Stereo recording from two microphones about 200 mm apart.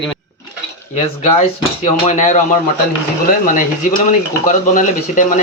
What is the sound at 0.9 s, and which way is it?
Speech, 30° left (ahead or behind).